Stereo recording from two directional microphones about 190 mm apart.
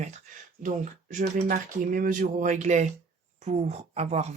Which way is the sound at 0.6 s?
45° right (ahead or behind).